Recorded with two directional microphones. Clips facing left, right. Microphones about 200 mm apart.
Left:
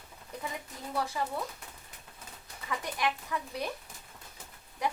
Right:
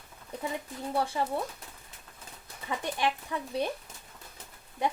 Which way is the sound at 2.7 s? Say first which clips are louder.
Right 2 dB; 30° right (ahead or behind).